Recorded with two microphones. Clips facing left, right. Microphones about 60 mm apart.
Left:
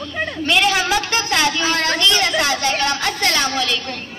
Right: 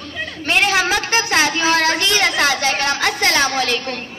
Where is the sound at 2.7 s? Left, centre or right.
Right.